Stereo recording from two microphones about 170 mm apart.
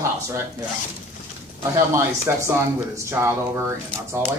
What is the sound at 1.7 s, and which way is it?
Speech, 15° right (ahead or behind).